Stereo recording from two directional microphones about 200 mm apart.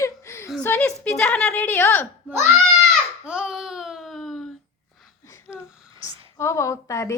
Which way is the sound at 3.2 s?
5° right (ahead or behind).